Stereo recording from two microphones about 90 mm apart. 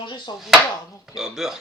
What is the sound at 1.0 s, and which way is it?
Speech, 5° right (ahead or behind).